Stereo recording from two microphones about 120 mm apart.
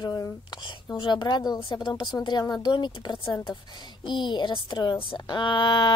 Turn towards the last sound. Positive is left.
turn(degrees=40)  # may be behind; listen again after turning